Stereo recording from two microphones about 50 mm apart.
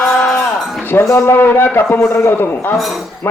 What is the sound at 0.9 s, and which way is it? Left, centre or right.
A man's voice, left.